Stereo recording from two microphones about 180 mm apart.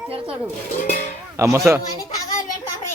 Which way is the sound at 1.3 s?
15° right (ahead or behind).